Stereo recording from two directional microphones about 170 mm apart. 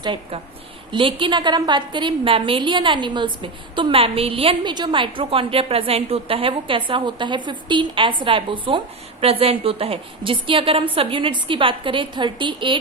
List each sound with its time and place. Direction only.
0.0 s a woman's voice: 30° right (ahead or behind)